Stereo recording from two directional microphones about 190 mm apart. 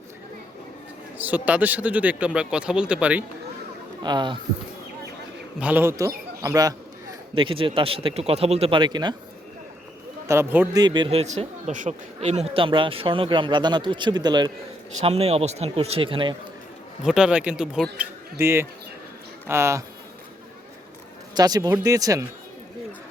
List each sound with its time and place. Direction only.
1.2 s speech: 10° right (ahead or behind)
4.0 s speech: 25° right (ahead or behind)
5.5 s a man's voice: 10° right (ahead or behind)
10.2 s speech: 10° right (ahead or behind)
10.8 s speech: 25° right (ahead or behind)
15.0 s speech: 35° right (ahead or behind)
17.0 s speech: 5° right (ahead or behind)
21.3 s speech: 20° right (ahead or behind)